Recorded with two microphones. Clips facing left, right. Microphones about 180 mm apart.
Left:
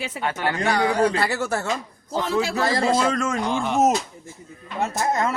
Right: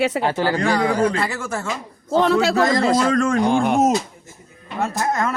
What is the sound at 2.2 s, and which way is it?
Speech, 70° right (ahead or behind).